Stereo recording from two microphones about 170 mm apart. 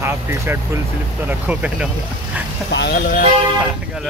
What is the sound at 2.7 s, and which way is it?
Speech, 80° left.